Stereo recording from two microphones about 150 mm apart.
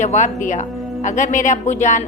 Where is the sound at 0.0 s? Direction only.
55° left (ahead or behind).